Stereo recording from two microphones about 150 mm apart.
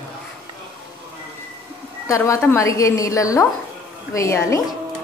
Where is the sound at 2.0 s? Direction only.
20° left (ahead or behind).